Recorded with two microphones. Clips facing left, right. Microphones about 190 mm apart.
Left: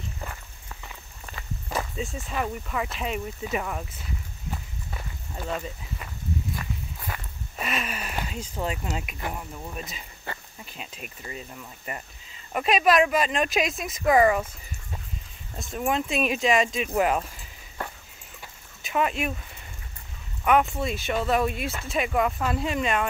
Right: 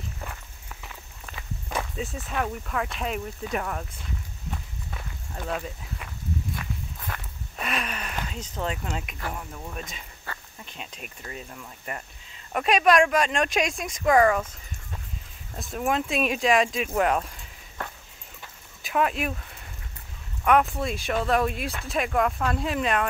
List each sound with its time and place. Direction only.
0.8 s walk: 5° left (ahead or behind)
8.9 s speech: 10° left (ahead or behind)
10.3 s a sound: 20° left (ahead or behind)
10.6 s speech: 5° left (ahead or behind)
18.4 s dog: centre (ahead or behind)
20.4 s speech: centre (ahead or behind)